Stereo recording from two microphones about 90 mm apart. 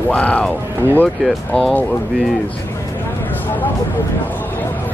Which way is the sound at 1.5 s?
15° left (ahead or behind).